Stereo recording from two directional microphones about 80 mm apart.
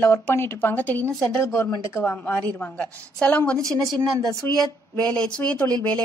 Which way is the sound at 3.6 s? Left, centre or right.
Right.